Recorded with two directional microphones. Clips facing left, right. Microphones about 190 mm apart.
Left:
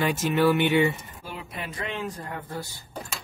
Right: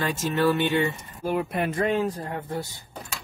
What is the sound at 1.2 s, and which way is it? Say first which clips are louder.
Speech: right 13 dB; 50° right (ahead or behind).